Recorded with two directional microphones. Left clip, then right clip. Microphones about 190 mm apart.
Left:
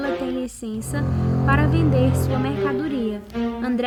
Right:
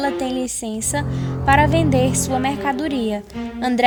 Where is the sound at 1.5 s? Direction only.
35° right (ahead or behind).